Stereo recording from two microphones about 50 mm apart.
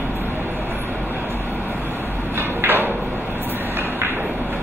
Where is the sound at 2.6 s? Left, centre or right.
Right.